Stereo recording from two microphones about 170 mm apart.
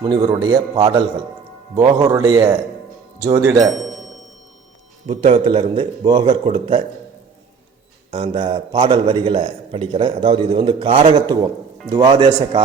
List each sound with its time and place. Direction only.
0.3 s a man's voice: 25° right (ahead or behind)
3.7 s speech: centre (ahead or behind)
5.0 s a man's voice: 35° right (ahead or behind)
8.1 s a man's voice: 30° right (ahead or behind)
11.9 s a man's voice: 20° right (ahead or behind)